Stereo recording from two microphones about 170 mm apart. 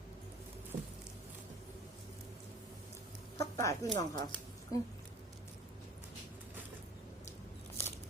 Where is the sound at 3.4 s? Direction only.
20° left (ahead or behind).